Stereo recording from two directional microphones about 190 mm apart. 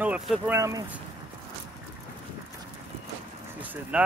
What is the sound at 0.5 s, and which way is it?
Speech, 15° right (ahead or behind).